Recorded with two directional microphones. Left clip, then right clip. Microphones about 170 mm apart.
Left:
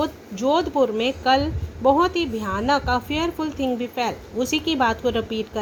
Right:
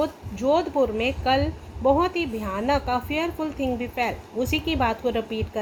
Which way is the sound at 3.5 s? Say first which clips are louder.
Left 2 dB; 55° left (ahead or behind).